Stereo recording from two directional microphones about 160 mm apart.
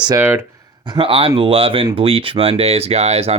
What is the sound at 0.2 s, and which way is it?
Speech, 15° right (ahead or behind).